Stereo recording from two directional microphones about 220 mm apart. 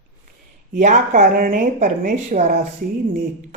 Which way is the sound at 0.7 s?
35° right (ahead or behind).